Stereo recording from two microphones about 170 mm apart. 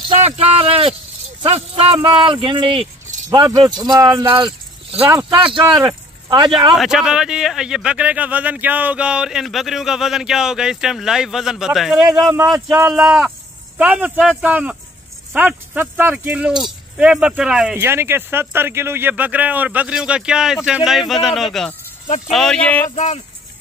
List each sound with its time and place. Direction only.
0.2 s speech: 35° right (ahead or behind)
3.3 s speech: 20° right (ahead or behind)
6.7 s a man's voice: centre (ahead or behind)
17.7 s a man's voice: 15° right (ahead or behind); by 22.8 s 10° left (ahead or behind)
22.8 s speech: 45° left (ahead or behind)